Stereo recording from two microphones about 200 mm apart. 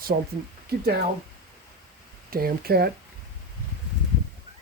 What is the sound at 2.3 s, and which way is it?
Speech, 50° right (ahead or behind).